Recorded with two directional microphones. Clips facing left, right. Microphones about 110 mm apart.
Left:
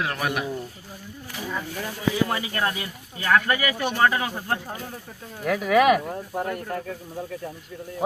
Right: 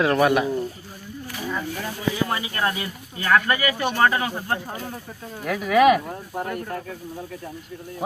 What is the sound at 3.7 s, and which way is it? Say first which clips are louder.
Speech: right 2 dB; 10° left (ahead or behind).